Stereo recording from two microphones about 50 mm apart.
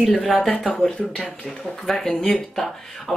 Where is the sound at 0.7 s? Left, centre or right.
Left.